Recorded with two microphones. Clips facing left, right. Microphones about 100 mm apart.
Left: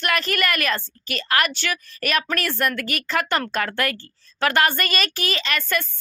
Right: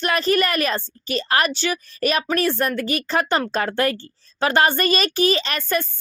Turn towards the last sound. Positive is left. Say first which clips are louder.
# right 3 dB
turn(degrees=-30)  # may be behind; listen again after turning